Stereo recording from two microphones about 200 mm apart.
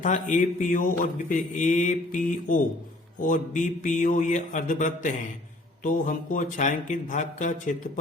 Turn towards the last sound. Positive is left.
turn(degrees=40)  # may be behind; listen again after turning